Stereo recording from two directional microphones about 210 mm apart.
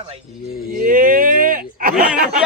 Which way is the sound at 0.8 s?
40° right (ahead or behind).